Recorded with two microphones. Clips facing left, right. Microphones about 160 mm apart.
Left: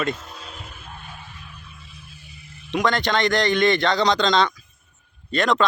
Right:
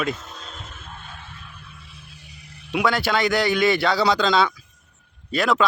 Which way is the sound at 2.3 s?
75° right (ahead or behind).